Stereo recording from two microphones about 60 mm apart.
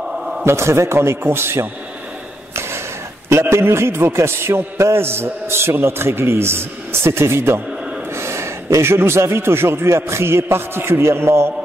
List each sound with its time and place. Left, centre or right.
0.2 s a sound: centre
0.5 s a man's voice: right
3.3 s a man's voice: right